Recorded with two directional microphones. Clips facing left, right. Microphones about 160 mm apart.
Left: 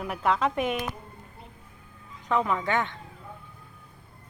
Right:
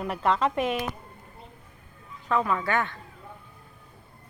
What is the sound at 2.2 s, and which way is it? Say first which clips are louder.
Speech: even; 20° left (ahead or behind).